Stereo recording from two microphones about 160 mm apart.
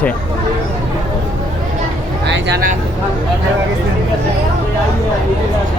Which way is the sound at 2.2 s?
75° right (ahead or behind).